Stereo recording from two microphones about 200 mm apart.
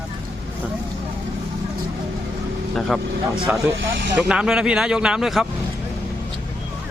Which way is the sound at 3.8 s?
65° right (ahead or behind).